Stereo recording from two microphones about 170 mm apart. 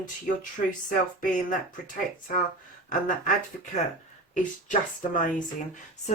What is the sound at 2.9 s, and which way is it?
Speech, 50° left (ahead or behind).